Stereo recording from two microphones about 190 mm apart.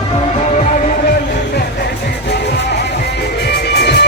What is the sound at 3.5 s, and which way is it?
Music, 60° left (ahead or behind).